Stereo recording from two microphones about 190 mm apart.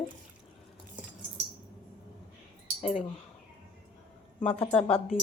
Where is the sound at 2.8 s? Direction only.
40° left (ahead or behind).